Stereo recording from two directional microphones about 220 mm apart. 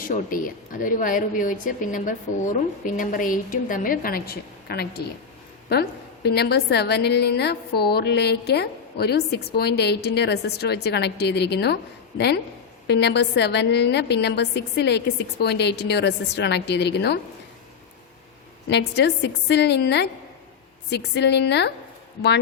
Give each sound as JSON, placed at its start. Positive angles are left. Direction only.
{"t": 0.1, "sound": "a woman's voice", "side_deg": 40}
{"t": 18.7, "sound": "a woman's voice", "side_deg": 50}